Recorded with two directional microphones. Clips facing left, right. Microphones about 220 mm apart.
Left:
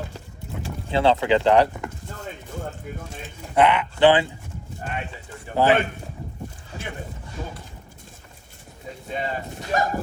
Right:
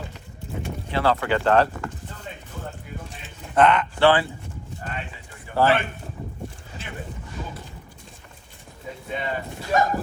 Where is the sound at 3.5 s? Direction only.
10° left (ahead or behind).